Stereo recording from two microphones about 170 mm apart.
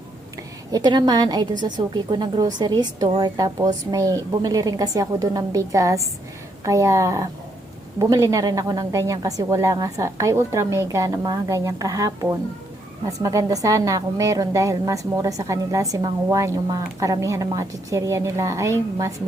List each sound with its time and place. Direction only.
0.7 s a woman's voice: 25° right (ahead or behind)